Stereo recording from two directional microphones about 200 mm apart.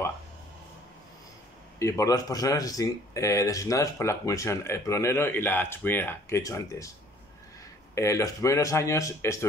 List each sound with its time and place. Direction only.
1.8 s speech: 15° left (ahead or behind)
7.9 s speech: 15° left (ahead or behind)